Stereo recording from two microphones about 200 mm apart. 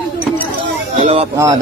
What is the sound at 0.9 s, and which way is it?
Speech, 30° right (ahead or behind).